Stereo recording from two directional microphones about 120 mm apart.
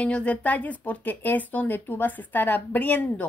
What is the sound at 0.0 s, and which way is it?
Speech, 10° left (ahead or behind).